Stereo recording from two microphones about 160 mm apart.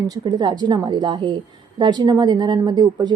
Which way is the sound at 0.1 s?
25° right (ahead or behind).